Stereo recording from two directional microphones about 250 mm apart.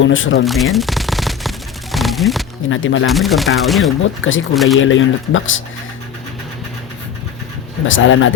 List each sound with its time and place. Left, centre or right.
0.0 s speech: left
0.4 s machine gun: centre
2.6 s speech: left
3.1 s speech: centre
4.2 s speech: left
4.5 s speech: centre
4.8 s speech: left
7.9 s speech: left